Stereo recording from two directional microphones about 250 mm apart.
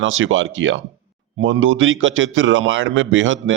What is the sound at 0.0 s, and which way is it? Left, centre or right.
Speech, right.